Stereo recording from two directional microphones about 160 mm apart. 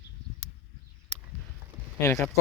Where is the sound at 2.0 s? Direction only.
20° left (ahead or behind).